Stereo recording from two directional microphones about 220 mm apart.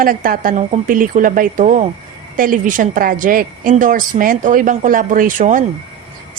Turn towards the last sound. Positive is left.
turn(degrees=-35)  # may be behind; listen again after turning